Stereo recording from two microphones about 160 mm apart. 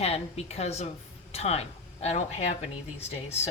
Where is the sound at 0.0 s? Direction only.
40° left (ahead or behind).